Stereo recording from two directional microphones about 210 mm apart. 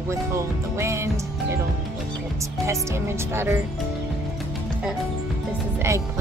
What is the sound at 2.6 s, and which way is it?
Speech, 15° right (ahead or behind).